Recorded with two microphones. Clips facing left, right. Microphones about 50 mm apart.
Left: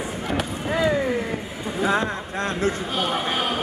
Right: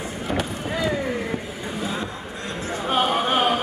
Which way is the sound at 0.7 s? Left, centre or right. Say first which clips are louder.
Left 5 dB; centre.